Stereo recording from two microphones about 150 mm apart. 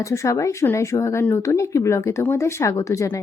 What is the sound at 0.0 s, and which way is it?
Speech, 20° left (ahead or behind).